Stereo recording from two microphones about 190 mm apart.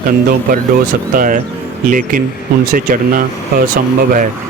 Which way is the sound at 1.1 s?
45° right (ahead or behind).